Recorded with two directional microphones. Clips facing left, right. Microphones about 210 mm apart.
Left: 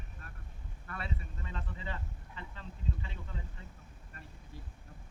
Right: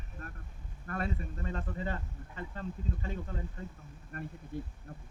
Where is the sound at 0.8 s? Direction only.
45° right (ahead or behind).